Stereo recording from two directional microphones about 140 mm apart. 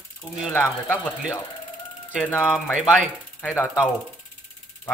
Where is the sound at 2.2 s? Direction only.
15° left (ahead or behind).